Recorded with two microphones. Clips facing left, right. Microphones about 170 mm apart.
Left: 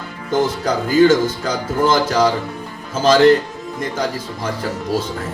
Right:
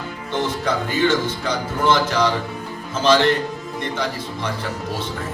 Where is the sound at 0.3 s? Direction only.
40° left (ahead or behind).